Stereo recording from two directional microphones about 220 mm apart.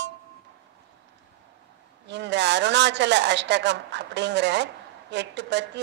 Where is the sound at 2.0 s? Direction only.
50° right (ahead or behind).